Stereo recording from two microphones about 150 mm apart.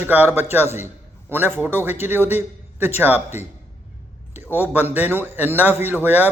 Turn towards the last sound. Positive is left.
turn(degrees=-10)  # may be behind; listen again after turning